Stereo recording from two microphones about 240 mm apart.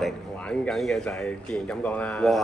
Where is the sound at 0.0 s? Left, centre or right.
Centre.